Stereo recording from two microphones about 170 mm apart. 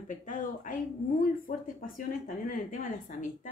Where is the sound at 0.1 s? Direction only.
50° left (ahead or behind).